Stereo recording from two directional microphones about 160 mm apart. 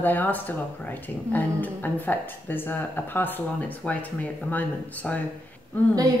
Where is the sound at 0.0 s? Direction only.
10° left (ahead or behind).